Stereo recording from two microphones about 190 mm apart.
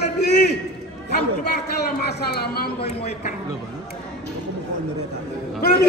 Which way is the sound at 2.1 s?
60° left (ahead or behind).